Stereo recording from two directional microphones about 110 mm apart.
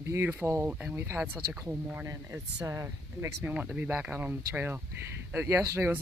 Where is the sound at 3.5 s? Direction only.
15° right (ahead or behind).